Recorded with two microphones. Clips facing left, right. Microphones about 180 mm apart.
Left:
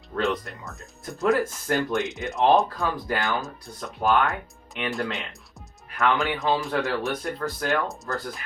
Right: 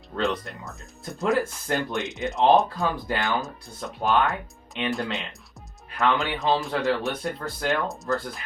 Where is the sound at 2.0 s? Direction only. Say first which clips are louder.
Even; centre (ahead or behind).